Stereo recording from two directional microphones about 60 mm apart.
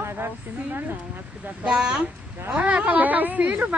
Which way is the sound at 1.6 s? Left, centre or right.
Centre.